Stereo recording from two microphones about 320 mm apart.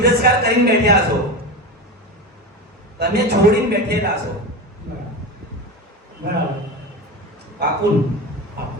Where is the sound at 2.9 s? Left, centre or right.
Right.